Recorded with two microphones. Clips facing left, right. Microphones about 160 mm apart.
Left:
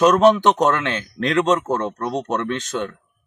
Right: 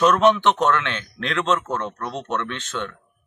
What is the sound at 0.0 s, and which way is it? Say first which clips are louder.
A man's voice: left 3 dB; 35° left (ahead or behind).